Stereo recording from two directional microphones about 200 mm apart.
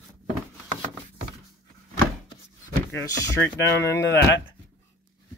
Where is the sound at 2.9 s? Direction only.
15° left (ahead or behind).